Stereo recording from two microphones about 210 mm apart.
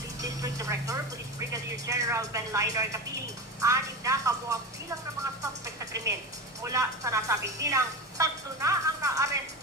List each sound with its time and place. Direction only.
0.2 s music: 15° right (ahead or behind)
1.7 s a woman's voice: 15° right (ahead or behind)